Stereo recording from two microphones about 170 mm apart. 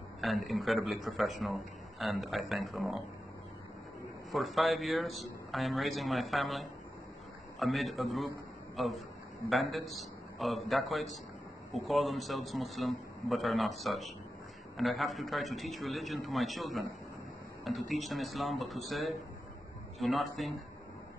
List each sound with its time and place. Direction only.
0.2 s a man's voice: centre (ahead or behind)
4.3 s a man's voice: centre (ahead or behind)